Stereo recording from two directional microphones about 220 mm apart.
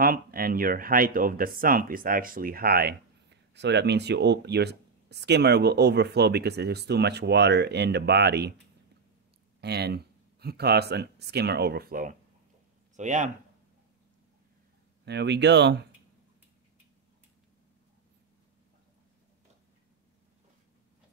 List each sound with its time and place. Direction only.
0.0 s speech: 40° right (ahead or behind)
9.6 s speech: 50° right (ahead or behind)
15.0 s speech: 50° right (ahead or behind)